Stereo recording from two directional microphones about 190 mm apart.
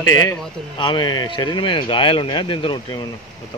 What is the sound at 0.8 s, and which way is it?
Speech, 25° left (ahead or behind).